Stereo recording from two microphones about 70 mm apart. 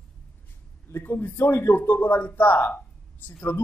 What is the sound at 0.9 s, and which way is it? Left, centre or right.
Speech, left.